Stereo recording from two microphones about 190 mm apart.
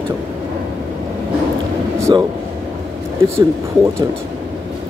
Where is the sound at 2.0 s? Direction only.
15° right (ahead or behind).